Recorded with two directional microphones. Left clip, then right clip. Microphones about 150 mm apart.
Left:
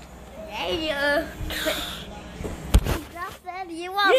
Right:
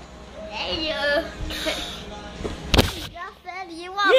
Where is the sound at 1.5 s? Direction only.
40° left (ahead or behind).